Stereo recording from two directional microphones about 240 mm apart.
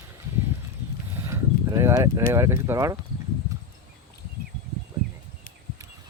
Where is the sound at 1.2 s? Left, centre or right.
Centre.